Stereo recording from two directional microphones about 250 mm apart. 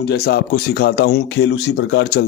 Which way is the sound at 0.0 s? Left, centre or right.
Left.